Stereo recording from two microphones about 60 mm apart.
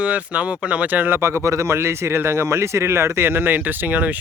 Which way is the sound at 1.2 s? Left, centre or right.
Right.